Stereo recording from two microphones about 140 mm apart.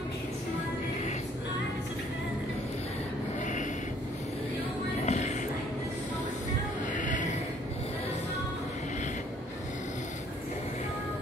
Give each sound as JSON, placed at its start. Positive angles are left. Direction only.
{"t": 5.0, "sound": "music", "side_deg": 55}
{"t": 6.9, "sound": "music", "side_deg": 65}